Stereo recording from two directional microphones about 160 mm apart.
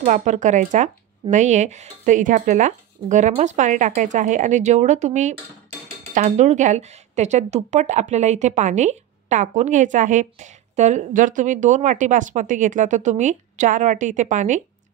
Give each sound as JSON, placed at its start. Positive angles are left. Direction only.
{"t": 0.0, "sound": "speech", "side_deg": -50}